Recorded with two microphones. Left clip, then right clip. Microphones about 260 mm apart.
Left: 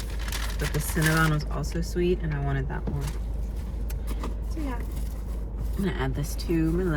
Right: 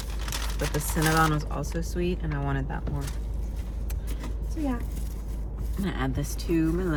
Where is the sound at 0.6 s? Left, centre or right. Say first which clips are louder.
Even; centre.